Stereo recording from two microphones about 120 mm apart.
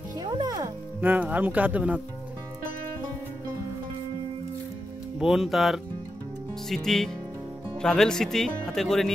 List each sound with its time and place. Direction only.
0.2 s music: 35° right (ahead or behind)
1.0 s speech: 15° right (ahead or behind)
5.2 s speech: 5° right (ahead or behind)